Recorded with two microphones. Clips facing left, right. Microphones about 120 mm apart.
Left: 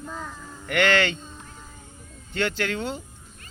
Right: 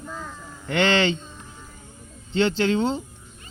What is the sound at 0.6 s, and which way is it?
Speech, 25° right (ahead or behind).